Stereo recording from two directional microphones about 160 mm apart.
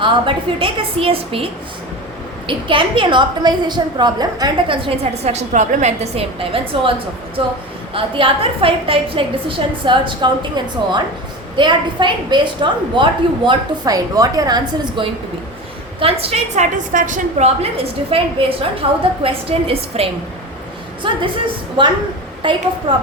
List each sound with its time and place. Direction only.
0.0 s a woman's voice: 30° right (ahead or behind)
2.5 s a woman's voice: 30° right (ahead or behind)
4.9 s a woman's voice: 45° right (ahead or behind)
7.9 s a woman's voice: 35° right (ahead or behind)
11.5 s a woman's voice: 30° right (ahead or behind)
16.0 s a woman's voice: 35° right (ahead or behind)